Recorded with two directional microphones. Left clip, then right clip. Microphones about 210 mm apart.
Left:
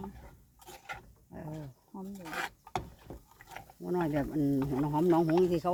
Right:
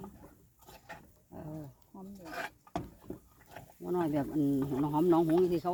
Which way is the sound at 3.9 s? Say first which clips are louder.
Even; 5° left (ahead or behind).